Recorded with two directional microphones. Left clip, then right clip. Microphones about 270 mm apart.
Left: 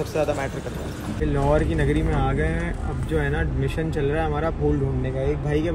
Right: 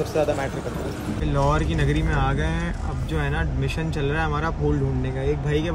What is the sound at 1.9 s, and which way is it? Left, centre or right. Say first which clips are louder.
Speech: left 1 dB; right.